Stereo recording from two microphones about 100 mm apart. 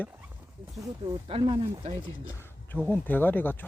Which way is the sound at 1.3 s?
75° right (ahead or behind).